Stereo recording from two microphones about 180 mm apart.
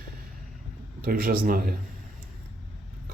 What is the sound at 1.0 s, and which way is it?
Speech, 55° right (ahead or behind).